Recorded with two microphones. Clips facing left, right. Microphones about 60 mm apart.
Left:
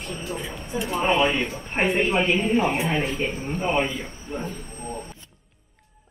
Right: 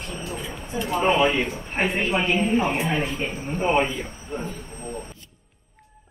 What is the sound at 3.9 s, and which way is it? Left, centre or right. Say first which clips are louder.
Speech: right 1 dB; centre.